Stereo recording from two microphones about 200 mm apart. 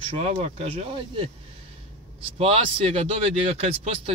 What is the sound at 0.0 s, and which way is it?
Speech, 30° right (ahead or behind).